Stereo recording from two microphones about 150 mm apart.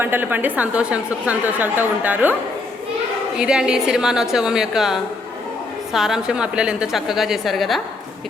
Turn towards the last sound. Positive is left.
turn(degrees=0)  # may be behind; listen again after turning